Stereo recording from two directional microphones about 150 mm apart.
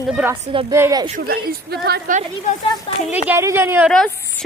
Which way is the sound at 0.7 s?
20° right (ahead or behind).